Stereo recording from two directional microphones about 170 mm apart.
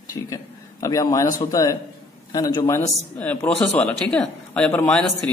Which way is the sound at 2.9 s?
10° left (ahead or behind).